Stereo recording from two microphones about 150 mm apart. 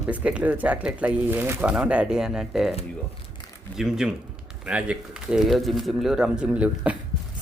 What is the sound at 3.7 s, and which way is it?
Speech, 5° right (ahead or behind).